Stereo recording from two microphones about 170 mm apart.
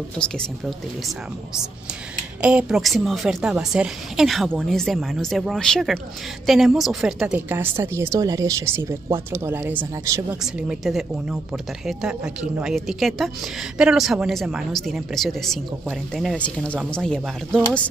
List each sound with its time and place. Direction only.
0.2 s speech: 5° left (ahead or behind)
2.4 s a woman's voice: 5° right (ahead or behind)
10.4 s speech: centre (ahead or behind)